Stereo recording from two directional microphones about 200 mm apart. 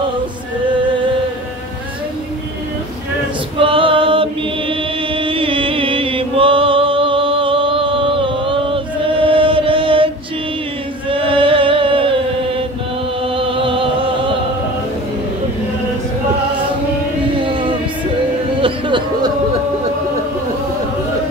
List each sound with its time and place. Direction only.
3.5 s chant: 25° right (ahead or behind)
13.4 s music: 25° right (ahead or behind)
17.4 s music: 25° right (ahead or behind)
18.6 s a sound: 25° right (ahead or behind)